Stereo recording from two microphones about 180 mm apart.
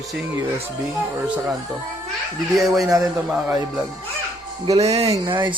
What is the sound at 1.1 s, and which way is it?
Speech, 10° right (ahead or behind).